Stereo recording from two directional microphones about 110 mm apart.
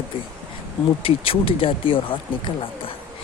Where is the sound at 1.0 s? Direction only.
60° left (ahead or behind).